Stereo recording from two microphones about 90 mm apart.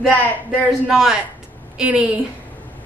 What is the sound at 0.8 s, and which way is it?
A woman's voice, 5° right (ahead or behind).